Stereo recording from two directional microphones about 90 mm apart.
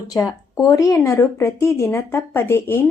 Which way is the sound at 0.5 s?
35° left (ahead or behind).